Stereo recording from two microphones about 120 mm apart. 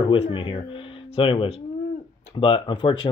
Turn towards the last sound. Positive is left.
turn(degrees=45)  # may be behind; listen again after turning